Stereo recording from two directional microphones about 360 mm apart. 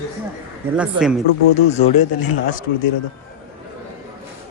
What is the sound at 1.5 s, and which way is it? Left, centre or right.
Speech, centre.